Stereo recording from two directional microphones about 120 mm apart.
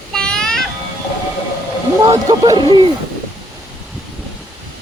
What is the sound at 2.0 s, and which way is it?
Speech, 35° right (ahead or behind).